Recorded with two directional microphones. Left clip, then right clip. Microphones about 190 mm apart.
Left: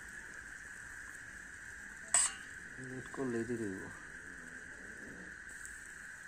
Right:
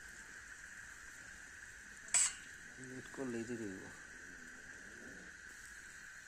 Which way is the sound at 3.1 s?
10° left (ahead or behind).